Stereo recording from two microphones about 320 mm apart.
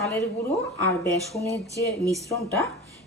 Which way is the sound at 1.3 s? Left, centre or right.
Centre.